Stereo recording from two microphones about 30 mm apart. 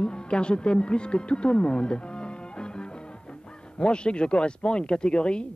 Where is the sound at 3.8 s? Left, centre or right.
Left.